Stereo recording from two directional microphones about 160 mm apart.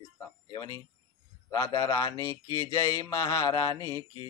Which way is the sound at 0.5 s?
25° left (ahead or behind).